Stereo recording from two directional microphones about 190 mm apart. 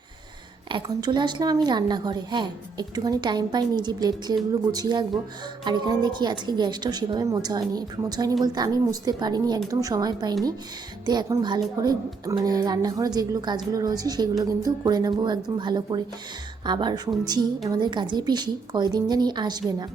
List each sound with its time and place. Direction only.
0.7 s speech: 25° right (ahead or behind)